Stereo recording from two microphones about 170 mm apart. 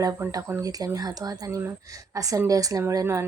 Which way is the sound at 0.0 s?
20° right (ahead or behind).